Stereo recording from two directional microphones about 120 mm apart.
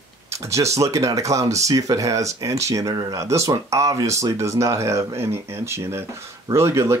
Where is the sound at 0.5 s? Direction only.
25° right (ahead or behind).